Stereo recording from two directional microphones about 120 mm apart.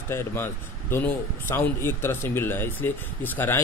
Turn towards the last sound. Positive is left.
turn(degrees=20)  # may be behind; listen again after turning